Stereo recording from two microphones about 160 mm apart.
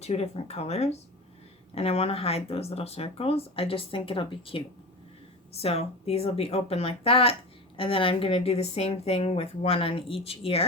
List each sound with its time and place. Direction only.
0.0 s speech: 40° left (ahead or behind)